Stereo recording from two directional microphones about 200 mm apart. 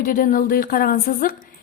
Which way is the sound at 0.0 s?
45° left (ahead or behind).